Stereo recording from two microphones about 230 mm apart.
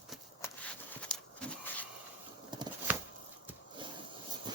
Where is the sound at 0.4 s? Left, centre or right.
Centre.